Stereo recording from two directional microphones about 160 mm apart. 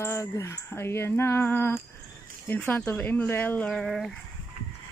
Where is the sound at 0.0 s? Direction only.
15° left (ahead or behind); by 4.1 s centre (ahead or behind).